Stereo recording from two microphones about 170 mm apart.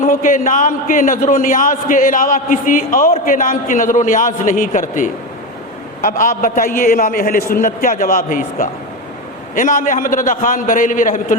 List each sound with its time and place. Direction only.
0.0 s a man's voice: 50° left (ahead or behind)